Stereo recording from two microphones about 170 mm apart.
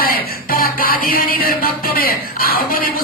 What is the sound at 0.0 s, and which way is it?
Music, 60° left (ahead or behind).